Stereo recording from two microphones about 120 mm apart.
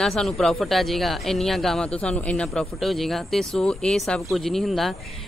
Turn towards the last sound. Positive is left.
turn(degrees=0)  # may be behind; listen again after turning